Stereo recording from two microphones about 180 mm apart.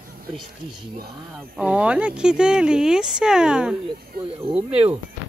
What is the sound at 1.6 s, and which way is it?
Speech, 5° right (ahead or behind).